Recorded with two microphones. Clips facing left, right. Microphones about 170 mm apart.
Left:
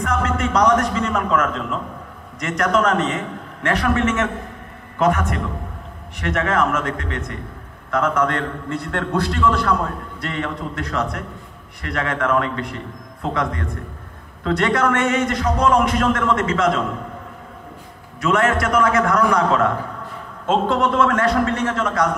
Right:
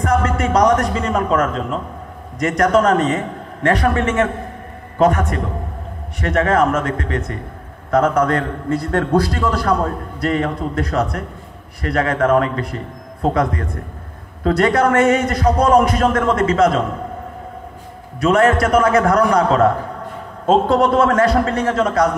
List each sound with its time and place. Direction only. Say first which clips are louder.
0.0 s a sound: right 4 dB; 35° right (ahead or behind)
2.4 s a man's voice: right 4 dB; 35° right (ahead or behind)
18.2 s a man's voice: right 5 dB; 35° right (ahead or behind)